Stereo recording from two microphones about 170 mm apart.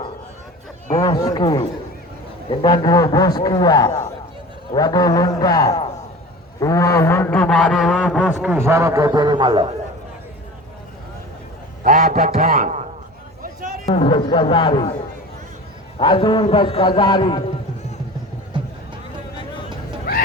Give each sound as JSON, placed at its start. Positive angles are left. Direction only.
{"t": 0.9, "sound": "a man's voice", "side_deg": 25}
{"t": 6.6, "sound": "a sound", "side_deg": 20}
{"t": 8.4, "sound": "a man's voice", "side_deg": -10}
{"t": 11.8, "sound": "a man's voice", "side_deg": -50}
{"t": 12.4, "sound": "a sound", "side_deg": -50}
{"t": 13.8, "sound": "a man's voice", "side_deg": 35}
{"t": 16.0, "sound": "a man's voice", "side_deg": 30}